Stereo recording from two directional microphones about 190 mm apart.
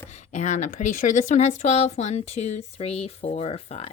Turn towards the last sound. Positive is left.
turn(degrees=30)  # may be behind; listen again after turning